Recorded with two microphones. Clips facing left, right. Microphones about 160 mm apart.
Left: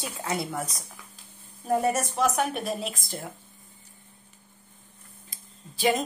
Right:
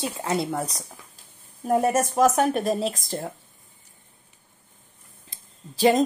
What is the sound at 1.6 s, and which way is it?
Speech, 45° right (ahead or behind).